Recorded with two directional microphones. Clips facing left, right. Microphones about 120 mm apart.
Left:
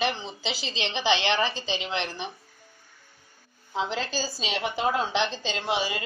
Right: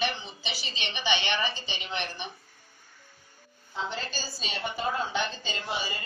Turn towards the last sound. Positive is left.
turn(degrees=90)